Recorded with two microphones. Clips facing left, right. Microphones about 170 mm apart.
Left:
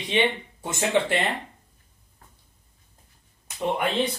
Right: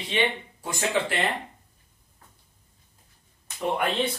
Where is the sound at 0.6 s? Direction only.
25° left (ahead or behind).